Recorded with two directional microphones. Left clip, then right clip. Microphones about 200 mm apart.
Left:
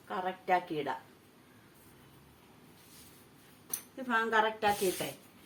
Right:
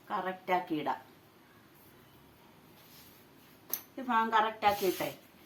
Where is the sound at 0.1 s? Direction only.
50° right (ahead or behind).